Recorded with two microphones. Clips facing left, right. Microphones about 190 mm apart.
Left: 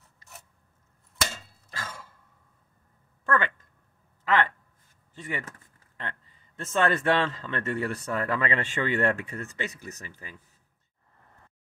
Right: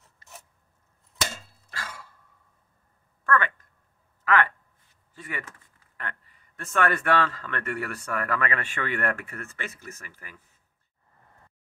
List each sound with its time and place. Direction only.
1.8 s sigh: 20° left (ahead or behind)
3.3 s a sound: 25° left (ahead or behind)
5.9 s speech: 25° left (ahead or behind)